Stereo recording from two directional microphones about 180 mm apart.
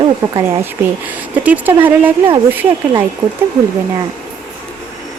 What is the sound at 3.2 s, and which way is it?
Speech, 25° right (ahead or behind).